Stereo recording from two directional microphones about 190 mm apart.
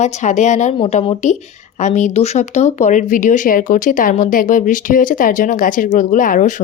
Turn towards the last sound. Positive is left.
turn(degrees=45)  # may be behind; listen again after turning